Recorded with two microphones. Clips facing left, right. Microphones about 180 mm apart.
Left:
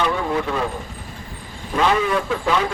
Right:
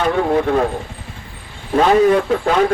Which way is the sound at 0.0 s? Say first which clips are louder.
Right 5 dB; 45° right (ahead or behind).